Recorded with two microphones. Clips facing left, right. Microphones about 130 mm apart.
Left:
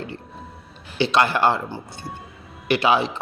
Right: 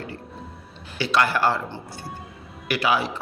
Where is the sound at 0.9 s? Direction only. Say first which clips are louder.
Left 3 dB; 25° left (ahead or behind).